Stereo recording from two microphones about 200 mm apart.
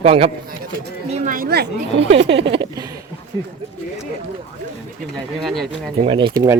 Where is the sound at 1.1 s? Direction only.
40° right (ahead or behind).